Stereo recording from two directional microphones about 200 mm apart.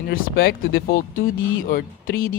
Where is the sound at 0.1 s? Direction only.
50° left (ahead or behind).